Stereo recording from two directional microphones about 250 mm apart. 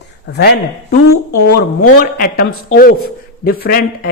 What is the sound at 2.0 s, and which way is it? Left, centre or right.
A man's voice, left.